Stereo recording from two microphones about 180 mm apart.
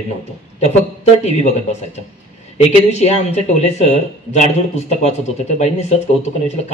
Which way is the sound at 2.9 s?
40° left (ahead or behind).